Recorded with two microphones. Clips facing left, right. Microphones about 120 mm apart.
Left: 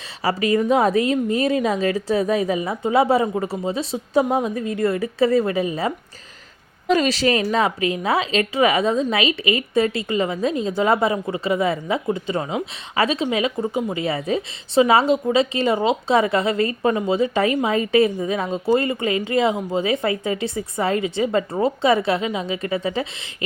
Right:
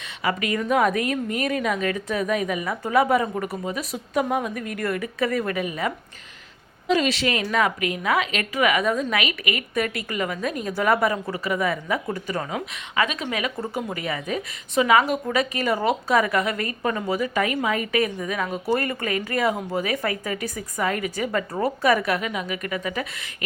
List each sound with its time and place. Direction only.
0.2 s a woman's voice: 35° left (ahead or behind)
6.8 s a woman's voice: 40° left (ahead or behind); by 12.6 s 20° left (ahead or behind)
13.0 s speech: 30° left (ahead or behind)
13.3 s a woman's voice: 20° left (ahead or behind)